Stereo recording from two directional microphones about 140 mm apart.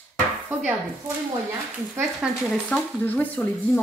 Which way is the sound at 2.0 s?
10° right (ahead or behind).